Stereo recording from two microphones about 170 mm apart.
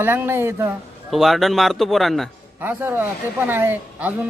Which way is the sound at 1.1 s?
Centre (ahead or behind).